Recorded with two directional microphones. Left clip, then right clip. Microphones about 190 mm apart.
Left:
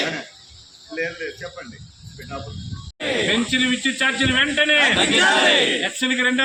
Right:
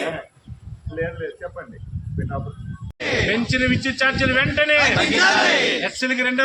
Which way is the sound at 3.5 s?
15° right (ahead or behind).